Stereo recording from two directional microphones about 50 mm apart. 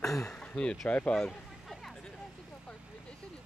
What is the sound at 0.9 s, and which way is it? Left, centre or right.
Speech, left.